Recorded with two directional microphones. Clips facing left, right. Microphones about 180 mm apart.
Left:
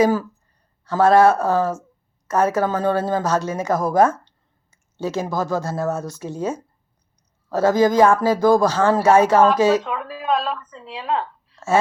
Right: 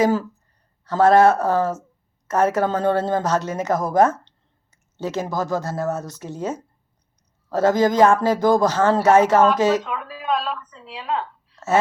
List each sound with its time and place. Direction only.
0.0 s a woman's voice: 25° right (ahead or behind)
7.7 s a woman's voice: 20° right (ahead or behind)
9.8 s a woman's voice: centre (ahead or behind)